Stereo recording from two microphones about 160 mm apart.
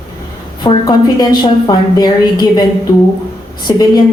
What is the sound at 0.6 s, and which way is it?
A woman's voice, 30° left (ahead or behind).